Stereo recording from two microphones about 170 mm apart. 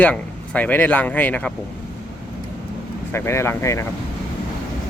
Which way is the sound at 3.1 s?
15° left (ahead or behind).